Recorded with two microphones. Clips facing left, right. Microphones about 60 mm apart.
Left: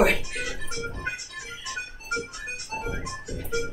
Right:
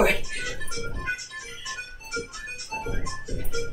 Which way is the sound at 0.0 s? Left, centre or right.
Centre.